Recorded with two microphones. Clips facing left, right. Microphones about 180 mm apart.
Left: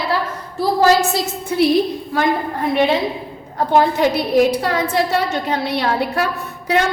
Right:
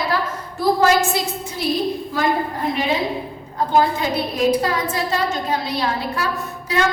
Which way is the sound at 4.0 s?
70° left (ahead or behind).